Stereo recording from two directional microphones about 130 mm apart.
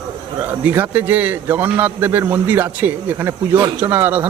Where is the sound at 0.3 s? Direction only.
15° right (ahead or behind).